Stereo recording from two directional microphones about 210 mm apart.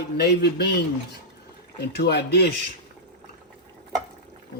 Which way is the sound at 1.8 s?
55° left (ahead or behind).